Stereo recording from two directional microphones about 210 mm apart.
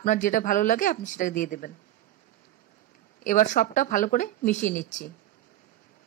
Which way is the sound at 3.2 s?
35° left (ahead or behind).